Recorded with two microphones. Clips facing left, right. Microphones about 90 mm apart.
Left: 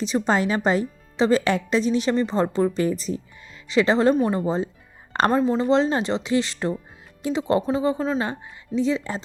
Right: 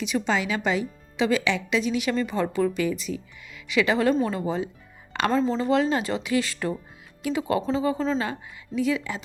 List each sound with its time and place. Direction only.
0.0 s a woman's voice: 35° left (ahead or behind)
5.3 s speech: 15° left (ahead or behind)
8.2 s speech: 25° left (ahead or behind)